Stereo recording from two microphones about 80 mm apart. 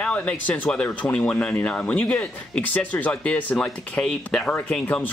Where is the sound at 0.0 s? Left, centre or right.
Centre.